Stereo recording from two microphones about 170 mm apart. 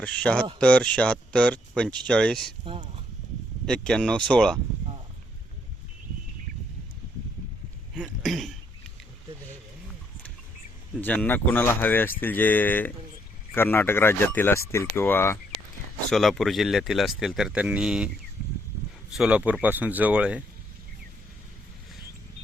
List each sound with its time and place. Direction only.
0.0 s speech: 5° left (ahead or behind)
2.6 s speech: 35° right (ahead or behind)
3.7 s speech: 5° left (ahead or behind)
8.0 s speech: centre (ahead or behind)
11.0 s speech: 10° left (ahead or behind)
16.0 s speech: centre (ahead or behind)
19.1 s speech: 5° right (ahead or behind)